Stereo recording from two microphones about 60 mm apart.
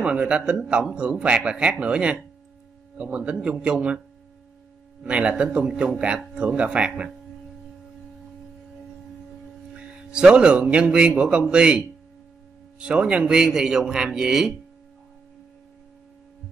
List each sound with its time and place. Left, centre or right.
0.0 s a man's voice: centre
5.0 s a man's voice: centre
9.8 s a man's voice: centre